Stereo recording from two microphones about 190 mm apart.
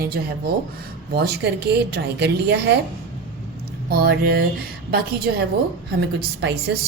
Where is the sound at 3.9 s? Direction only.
55° right (ahead or behind).